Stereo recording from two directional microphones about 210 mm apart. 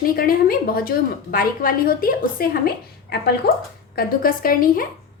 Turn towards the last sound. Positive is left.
turn(degrees=40)  # may be behind; listen again after turning